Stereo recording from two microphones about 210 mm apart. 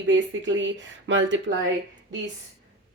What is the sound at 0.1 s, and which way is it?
A woman's voice, 60° right (ahead or behind).